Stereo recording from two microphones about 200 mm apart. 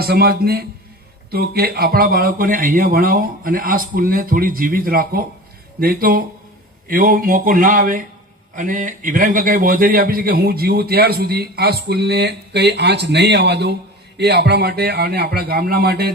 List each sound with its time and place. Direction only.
0.0 s a man's voice: 50° right (ahead or behind)